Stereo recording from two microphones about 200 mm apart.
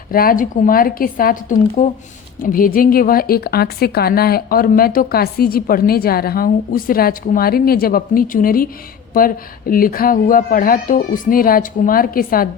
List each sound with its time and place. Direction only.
0.1 s a woman's voice: 45° left (ahead or behind)